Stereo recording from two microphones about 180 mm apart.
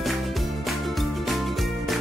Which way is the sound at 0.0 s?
Centre (ahead or behind).